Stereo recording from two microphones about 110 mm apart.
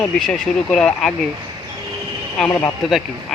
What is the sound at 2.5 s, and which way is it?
Speech, 30° left (ahead or behind).